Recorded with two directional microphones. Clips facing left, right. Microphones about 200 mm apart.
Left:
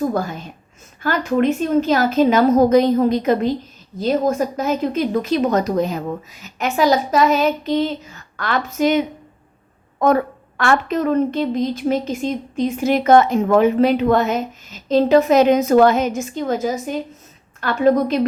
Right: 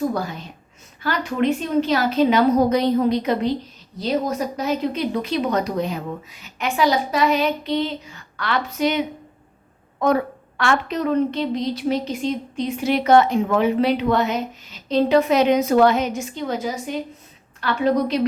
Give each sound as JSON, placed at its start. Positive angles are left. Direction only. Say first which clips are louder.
{"t": 0.1, "sound": "a woman's voice", "louder": "left 3 dB", "side_deg": 50}
{"t": 10.0, "sound": "a woman's voice", "louder": "left 3 dB", "side_deg": 50}